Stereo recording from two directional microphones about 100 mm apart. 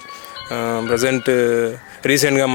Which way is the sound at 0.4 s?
25° left (ahead or behind).